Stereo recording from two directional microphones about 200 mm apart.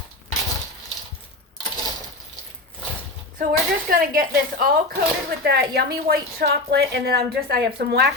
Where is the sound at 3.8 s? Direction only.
45° right (ahead or behind).